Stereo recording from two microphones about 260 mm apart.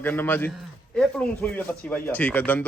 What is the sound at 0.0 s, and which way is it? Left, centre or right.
A man's voice, centre.